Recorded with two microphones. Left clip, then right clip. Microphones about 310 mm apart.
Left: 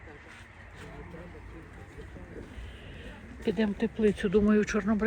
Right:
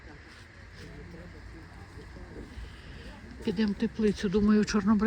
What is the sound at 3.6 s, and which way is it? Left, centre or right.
Speech, right.